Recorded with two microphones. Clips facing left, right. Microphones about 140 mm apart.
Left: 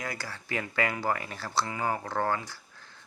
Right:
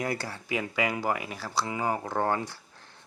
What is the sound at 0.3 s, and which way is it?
Speech, 10° right (ahead or behind).